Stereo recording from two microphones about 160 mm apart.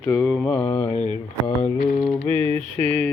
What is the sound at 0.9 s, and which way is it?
Mantra, 35° left (ahead or behind).